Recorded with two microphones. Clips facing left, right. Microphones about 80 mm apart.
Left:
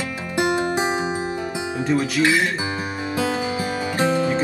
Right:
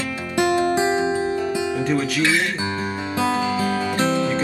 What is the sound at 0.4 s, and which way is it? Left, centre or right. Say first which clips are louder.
Music: right 2 dB; left.